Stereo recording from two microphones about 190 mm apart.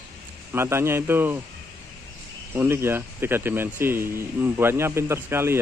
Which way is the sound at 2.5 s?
10° right (ahead or behind).